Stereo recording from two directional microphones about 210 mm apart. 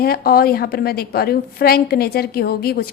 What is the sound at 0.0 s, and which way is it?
A woman's voice, 45° left (ahead or behind).